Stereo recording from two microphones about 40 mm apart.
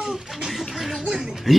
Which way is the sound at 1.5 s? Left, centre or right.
Centre.